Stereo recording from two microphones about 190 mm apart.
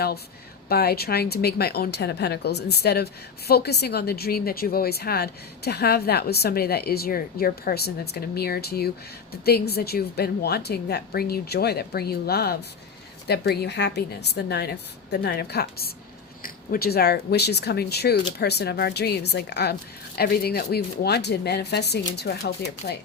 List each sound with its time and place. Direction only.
0.7 s a woman's voice: 55° left (ahead or behind)